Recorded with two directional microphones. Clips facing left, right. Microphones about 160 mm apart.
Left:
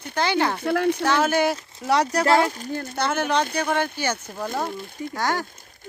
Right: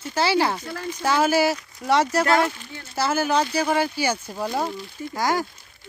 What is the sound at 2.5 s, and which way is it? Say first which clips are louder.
Speech: left 11 dB; 40° left (ahead or behind).